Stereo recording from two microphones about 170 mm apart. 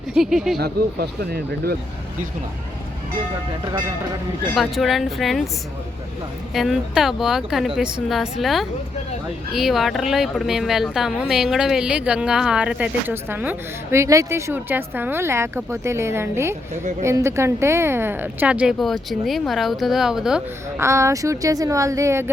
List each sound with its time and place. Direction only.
0.1 s speech: 5° right (ahead or behind)
0.6 s speech: 65° right (ahead or behind)
4.5 s speech: centre (ahead or behind)
6.5 s speech: centre (ahead or behind)
20.7 s speech: 15° right (ahead or behind)